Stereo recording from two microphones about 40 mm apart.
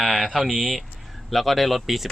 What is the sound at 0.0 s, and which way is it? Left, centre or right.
Speech, centre.